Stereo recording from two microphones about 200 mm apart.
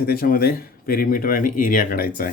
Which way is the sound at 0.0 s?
50° left (ahead or behind).